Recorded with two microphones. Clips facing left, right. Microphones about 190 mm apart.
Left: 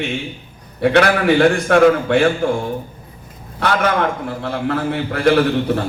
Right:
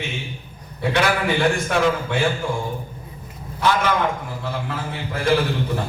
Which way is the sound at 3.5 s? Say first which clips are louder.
Left 3 dB; 65° left (ahead or behind).